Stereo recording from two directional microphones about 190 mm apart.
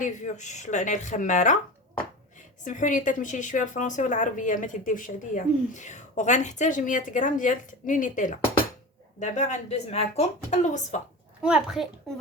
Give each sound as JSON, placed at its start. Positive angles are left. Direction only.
{"t": 0.0, "sound": "speech", "side_deg": 40}
{"t": 2.6, "sound": "speech", "side_deg": 40}
{"t": 11.4, "sound": "a child's voice", "side_deg": -5}